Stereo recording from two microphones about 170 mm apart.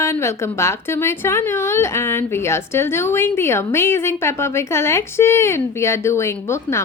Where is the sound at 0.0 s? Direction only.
15° left (ahead or behind).